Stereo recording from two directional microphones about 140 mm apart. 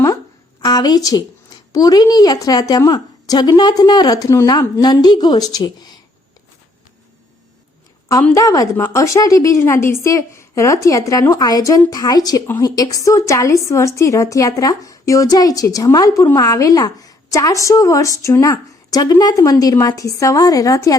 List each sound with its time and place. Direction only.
0.6 s a woman's voice: 30° left (ahead or behind)
8.3 s a woman's voice: 25° left (ahead or behind)